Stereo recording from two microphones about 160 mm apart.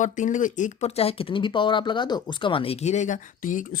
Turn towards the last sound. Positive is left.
turn(degrees=55)  # may be behind; listen again after turning